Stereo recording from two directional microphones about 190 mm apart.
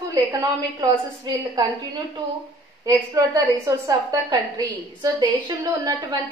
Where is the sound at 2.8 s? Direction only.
20° right (ahead or behind).